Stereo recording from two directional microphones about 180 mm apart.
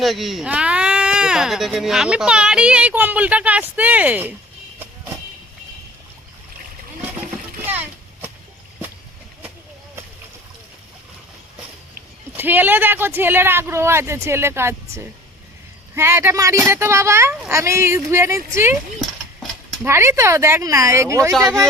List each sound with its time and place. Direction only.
0.0 s speech: centre (ahead or behind)
7.7 s a sound: 10° right (ahead or behind)
12.3 s speech: 10° right (ahead or behind)
19.8 s speech: 15° right (ahead or behind)
21.3 s speech: centre (ahead or behind)